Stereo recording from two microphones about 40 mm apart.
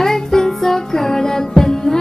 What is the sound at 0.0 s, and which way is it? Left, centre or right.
Music, centre.